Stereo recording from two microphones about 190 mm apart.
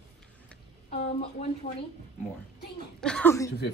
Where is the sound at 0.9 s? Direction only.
30° left (ahead or behind).